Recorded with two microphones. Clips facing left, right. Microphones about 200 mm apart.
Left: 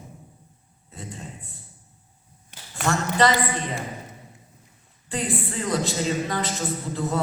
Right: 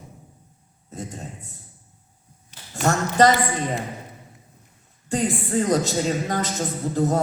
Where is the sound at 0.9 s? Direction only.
45° right (ahead or behind).